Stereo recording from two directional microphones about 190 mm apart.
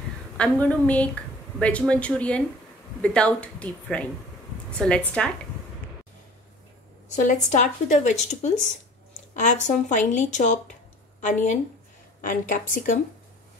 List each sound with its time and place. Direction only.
0.4 s a woman's voice: 5° left (ahead or behind)
7.2 s a woman's voice: 40° left (ahead or behind)